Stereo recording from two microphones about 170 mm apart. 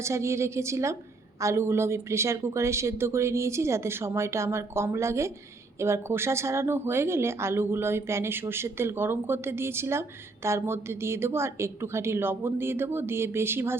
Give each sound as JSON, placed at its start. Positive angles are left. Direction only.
{"t": 0.0, "sound": "speech", "side_deg": -15}